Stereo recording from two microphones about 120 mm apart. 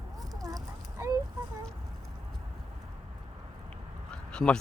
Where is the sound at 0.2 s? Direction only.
30° right (ahead or behind).